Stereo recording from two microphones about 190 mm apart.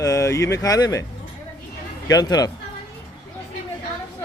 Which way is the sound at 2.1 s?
20° left (ahead or behind).